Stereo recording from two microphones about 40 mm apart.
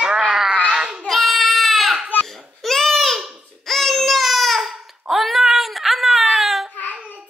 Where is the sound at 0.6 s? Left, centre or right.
Right.